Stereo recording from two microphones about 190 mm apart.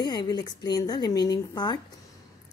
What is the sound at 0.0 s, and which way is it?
Speech, 20° left (ahead or behind).